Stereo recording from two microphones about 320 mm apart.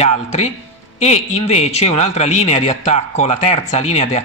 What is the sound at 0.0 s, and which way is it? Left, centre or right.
Speech, centre.